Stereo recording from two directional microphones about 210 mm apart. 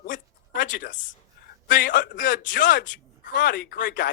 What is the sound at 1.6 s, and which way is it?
A woman's voice, 40° left (ahead or behind).